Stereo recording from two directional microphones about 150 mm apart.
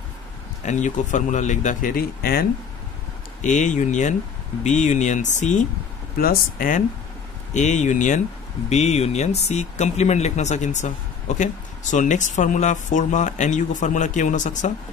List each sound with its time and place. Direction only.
0.7 s speech: 55° left (ahead or behind); by 2.4 s 90° left
3.4 s speech: 55° left (ahead or behind)
6.1 s speech: 70° left (ahead or behind)
7.5 s speech: 50° left (ahead or behind)